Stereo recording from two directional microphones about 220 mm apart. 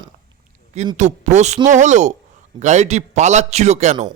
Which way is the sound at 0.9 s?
35° right (ahead or behind).